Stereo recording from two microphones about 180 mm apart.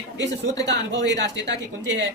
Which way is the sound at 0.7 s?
75° right (ahead or behind).